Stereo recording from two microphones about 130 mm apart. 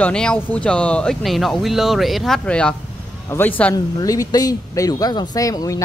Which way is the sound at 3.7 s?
25° left (ahead or behind).